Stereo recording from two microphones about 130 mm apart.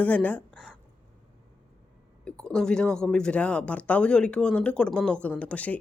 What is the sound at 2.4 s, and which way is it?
Speech, 5° left (ahead or behind).